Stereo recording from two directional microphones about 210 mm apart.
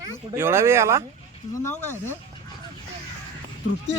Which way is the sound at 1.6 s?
10° left (ahead or behind).